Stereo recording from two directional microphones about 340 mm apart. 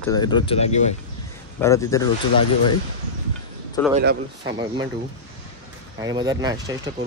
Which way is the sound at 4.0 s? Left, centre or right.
Right.